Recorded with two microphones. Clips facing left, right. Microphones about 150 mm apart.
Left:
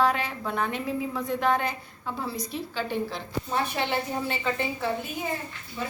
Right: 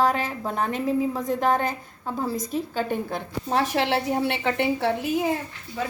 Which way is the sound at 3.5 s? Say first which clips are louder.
Right 5 dB; 90° right.